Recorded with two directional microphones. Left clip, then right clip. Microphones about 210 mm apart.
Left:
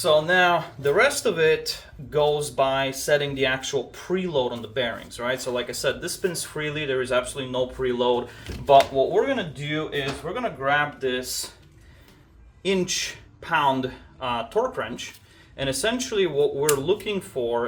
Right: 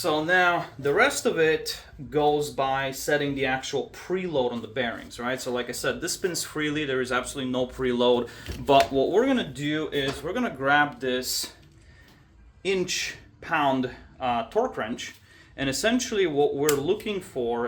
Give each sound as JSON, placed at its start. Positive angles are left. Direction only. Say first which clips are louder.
{"t": 0.0, "sound": "speech", "louder": "left 3 dB", "side_deg": -15}
{"t": 7.8, "sound": "speech", "louder": "right 1 dB", "side_deg": -35}
{"t": 8.7, "sound": "speech", "louder": "left 3 dB", "side_deg": -55}
{"t": 12.6, "sound": "speech", "louder": "left 2 dB", "side_deg": -15}